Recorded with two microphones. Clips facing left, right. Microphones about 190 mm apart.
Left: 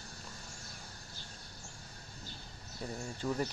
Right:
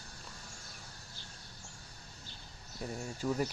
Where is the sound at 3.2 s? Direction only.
5° right (ahead or behind).